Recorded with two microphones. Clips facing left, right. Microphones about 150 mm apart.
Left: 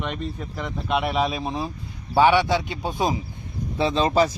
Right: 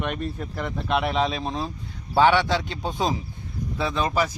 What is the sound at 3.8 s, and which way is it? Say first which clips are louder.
Speech: left 5 dB; 25° left (ahead or behind).